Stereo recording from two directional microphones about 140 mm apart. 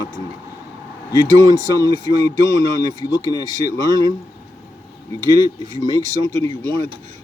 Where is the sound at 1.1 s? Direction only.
25° left (ahead or behind).